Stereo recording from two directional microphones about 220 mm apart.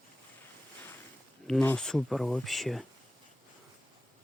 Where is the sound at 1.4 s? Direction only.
5° left (ahead or behind).